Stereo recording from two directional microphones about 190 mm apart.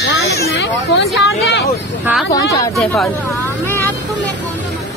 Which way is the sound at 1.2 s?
65° left (ahead or behind).